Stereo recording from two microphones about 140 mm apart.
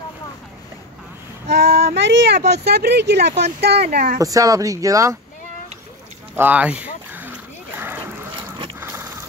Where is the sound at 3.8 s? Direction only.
90° right.